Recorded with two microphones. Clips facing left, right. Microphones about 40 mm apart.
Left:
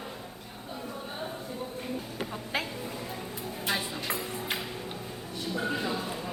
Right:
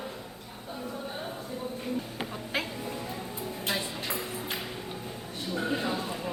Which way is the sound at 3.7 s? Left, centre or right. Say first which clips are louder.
Left 2 dB; left.